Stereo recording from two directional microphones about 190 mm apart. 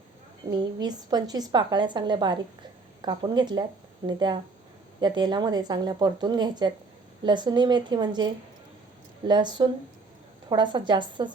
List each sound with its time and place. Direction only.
0.8 s speech: 20° right (ahead or behind)